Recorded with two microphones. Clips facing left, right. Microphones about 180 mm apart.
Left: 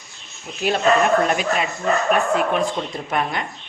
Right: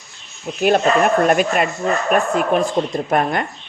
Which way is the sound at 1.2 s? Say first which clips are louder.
Right 5 dB; 55° right (ahead or behind).